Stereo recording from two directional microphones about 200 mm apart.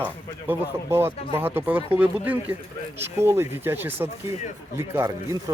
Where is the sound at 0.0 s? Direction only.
10° right (ahead or behind).